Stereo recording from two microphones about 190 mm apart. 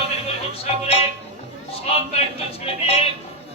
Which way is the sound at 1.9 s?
30° left (ahead or behind).